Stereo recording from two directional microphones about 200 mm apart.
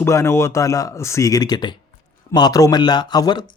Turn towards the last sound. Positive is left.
turn(degrees=20)  # may be behind; listen again after turning